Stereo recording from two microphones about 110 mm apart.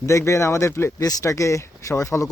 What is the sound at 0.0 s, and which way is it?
Speech, 30° left (ahead or behind).